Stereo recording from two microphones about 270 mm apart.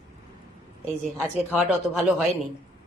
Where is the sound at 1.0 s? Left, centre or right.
Centre.